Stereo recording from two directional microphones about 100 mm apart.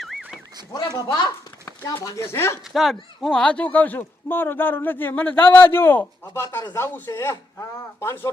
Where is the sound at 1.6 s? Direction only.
30° left (ahead or behind).